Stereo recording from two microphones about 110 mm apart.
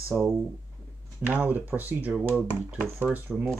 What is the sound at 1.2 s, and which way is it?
Speech, 15° right (ahead or behind).